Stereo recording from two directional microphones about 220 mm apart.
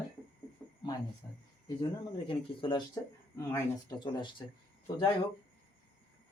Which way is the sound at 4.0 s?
20° left (ahead or behind).